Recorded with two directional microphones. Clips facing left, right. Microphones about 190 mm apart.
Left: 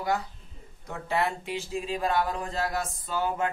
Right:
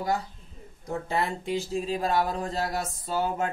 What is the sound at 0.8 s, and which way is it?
Speech, 35° right (ahead or behind).